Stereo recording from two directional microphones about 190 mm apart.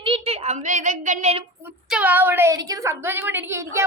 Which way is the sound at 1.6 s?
10° right (ahead or behind).